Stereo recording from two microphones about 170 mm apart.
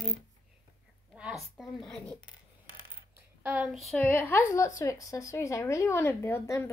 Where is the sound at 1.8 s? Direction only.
Centre (ahead or behind).